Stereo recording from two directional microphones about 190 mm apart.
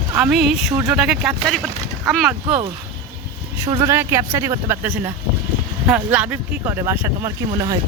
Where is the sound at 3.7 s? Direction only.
15° right (ahead or behind).